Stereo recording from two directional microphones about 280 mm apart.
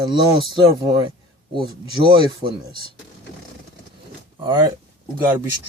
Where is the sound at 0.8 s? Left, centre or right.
Centre.